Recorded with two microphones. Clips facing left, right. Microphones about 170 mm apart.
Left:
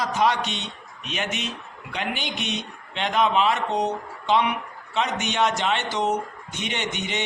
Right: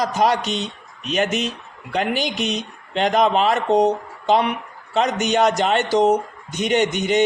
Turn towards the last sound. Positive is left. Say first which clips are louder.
# right 11 dB
turn(degrees=-40)  # may be behind; listen again after turning